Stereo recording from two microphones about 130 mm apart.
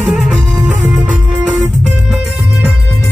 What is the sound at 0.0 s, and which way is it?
Music, 5° right (ahead or behind).